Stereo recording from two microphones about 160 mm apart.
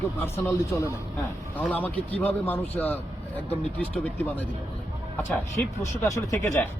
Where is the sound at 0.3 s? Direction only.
15° left (ahead or behind).